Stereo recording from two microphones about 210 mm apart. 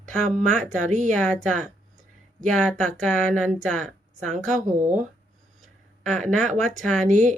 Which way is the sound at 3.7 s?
35° right (ahead or behind).